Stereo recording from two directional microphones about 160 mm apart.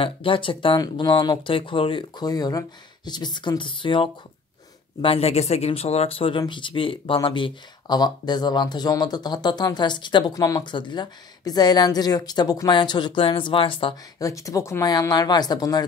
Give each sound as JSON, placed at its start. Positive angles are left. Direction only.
{"t": 0.0, "sound": "speech", "side_deg": 35}
{"t": 14.2, "sound": "speech", "side_deg": 20}